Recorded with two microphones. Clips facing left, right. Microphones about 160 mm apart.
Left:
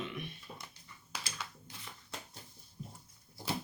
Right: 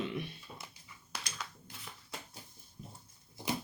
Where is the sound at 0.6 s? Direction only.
Centre (ahead or behind).